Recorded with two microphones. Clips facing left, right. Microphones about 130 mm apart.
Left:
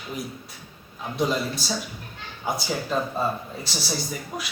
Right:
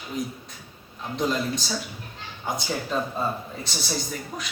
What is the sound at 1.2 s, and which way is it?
A man's voice, 5° left (ahead or behind).